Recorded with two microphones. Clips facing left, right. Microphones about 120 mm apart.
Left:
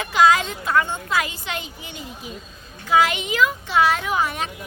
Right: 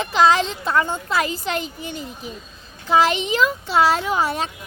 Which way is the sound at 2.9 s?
30° right (ahead or behind).